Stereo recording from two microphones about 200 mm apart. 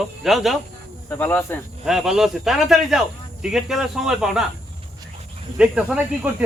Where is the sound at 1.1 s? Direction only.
10° left (ahead or behind).